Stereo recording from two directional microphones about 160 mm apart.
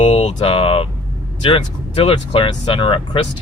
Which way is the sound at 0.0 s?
40° left (ahead or behind).